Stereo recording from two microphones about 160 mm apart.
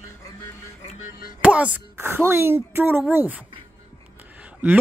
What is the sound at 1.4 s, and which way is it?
Speech, 10° right (ahead or behind).